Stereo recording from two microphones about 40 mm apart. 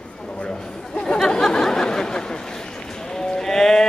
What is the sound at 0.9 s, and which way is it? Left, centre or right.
Chatter, left.